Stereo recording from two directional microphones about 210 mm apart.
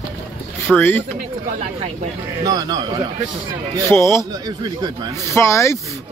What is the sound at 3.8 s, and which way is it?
Speech, 15° left (ahead or behind).